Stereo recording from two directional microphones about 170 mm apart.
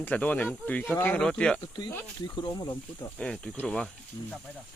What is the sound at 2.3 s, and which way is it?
Speech, 25° left (ahead or behind).